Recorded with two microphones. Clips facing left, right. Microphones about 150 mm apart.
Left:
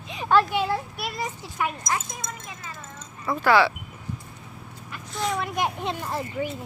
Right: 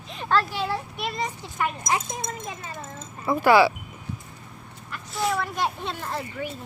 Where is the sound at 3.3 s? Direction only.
10° right (ahead or behind).